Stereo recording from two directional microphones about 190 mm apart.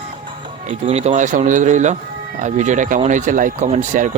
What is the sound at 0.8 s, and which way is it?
Speech, 35° right (ahead or behind).